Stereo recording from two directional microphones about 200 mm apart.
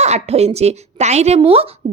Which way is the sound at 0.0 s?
35° right (ahead or behind).